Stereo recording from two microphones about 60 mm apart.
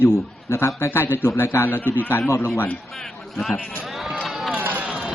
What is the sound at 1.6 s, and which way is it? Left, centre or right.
Speech, left.